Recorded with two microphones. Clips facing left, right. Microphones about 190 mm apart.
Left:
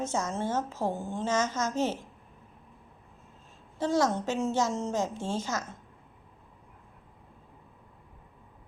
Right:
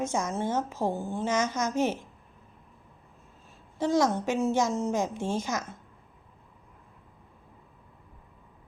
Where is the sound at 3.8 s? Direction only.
15° right (ahead or behind).